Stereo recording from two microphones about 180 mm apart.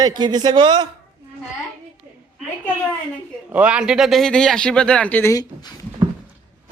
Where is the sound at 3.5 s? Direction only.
5° right (ahead or behind); by 5.7 s 15° left (ahead or behind).